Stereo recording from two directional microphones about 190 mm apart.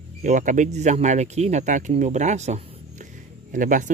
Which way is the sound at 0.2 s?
40° right (ahead or behind).